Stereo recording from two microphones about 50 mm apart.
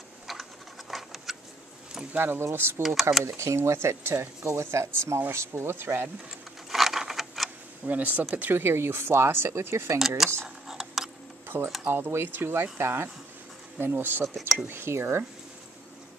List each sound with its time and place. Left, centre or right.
0.3 s a sound: centre
2.1 s speech: right
2.8 s speech: centre
3.3 s speech: right
4.5 s speech: right
5.5 s speech: right
6.7 s a sound: centre
7.8 s speech: right
8.6 s speech: right
9.9 s speech: centre
10.7 s a sound: centre
11.5 s speech: right
11.9 s speech: right